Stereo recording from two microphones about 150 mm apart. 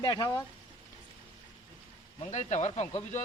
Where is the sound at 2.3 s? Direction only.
50° left (ahead or behind).